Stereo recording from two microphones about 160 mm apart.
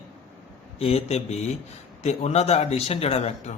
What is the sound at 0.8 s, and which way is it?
A man's voice, 40° left (ahead or behind).